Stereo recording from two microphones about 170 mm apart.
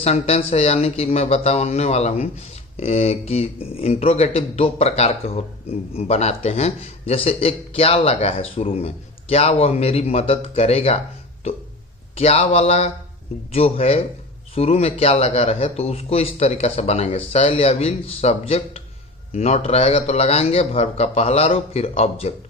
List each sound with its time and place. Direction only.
0.0 s speech: 35° left (ahead or behind)
12.1 s speech: 35° left (ahead or behind)